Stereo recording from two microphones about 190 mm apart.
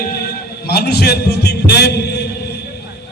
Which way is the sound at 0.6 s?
60° left (ahead or behind).